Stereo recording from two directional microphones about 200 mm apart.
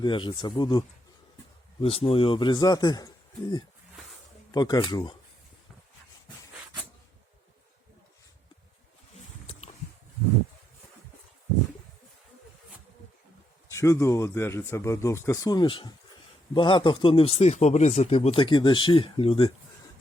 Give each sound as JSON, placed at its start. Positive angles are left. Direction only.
{"t": 0.0, "sound": "speech", "side_deg": 25}
{"t": 4.5, "sound": "speech", "side_deg": 20}
{"t": 13.7, "sound": "speech", "side_deg": 15}